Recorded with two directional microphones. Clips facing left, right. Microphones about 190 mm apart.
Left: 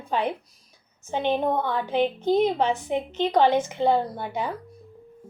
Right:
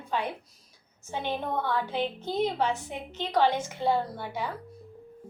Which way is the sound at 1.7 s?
20° left (ahead or behind).